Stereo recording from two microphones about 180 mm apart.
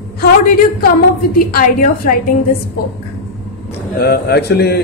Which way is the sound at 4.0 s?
60° left (ahead or behind).